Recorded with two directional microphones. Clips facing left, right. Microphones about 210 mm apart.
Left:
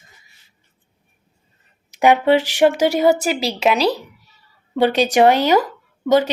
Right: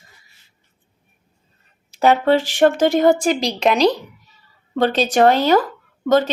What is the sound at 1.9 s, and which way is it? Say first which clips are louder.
A woman's voice: left 1 dB; 15° left (ahead or behind).